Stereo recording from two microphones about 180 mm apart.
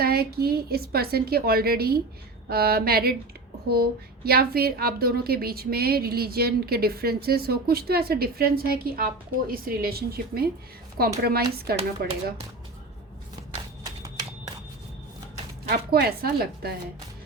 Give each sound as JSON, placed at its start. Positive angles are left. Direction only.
{"t": 0.0, "sound": "a woman's voice", "side_deg": -60}
{"t": 13.8, "sound": "a sound", "side_deg": -20}
{"t": 15.7, "sound": "a woman's voice", "side_deg": -60}